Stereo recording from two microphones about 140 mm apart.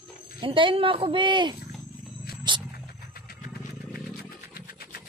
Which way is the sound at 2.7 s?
90° left.